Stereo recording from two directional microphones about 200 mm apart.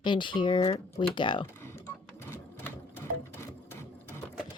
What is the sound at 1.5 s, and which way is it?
Sewing machine, 10° left (ahead or behind).